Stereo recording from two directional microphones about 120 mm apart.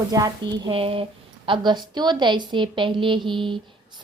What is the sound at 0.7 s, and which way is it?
A woman's voice, 50° right (ahead or behind).